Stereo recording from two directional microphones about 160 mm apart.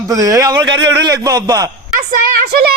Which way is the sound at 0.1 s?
20° right (ahead or behind).